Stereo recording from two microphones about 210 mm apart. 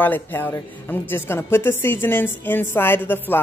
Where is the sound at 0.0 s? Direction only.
10° left (ahead or behind).